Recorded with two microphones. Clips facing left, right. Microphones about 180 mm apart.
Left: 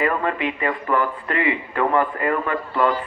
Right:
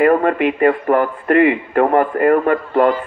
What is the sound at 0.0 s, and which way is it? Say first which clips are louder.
A man's voice: right 9 dB; 50° right (ahead or behind).